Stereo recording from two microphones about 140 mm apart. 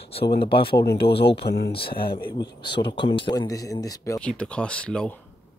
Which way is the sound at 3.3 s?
25° left (ahead or behind).